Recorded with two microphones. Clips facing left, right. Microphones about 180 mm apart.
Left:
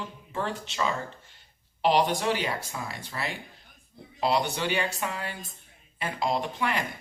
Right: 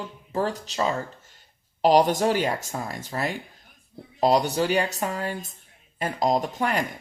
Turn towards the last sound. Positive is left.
turn(degrees=-45)  # may be behind; listen again after turning